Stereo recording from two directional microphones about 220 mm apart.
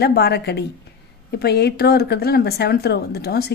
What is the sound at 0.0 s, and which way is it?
Speech, 45° left (ahead or behind).